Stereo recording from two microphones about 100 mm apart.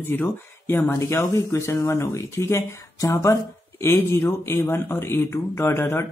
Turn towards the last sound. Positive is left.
turn(degrees=25)  # may be behind; listen again after turning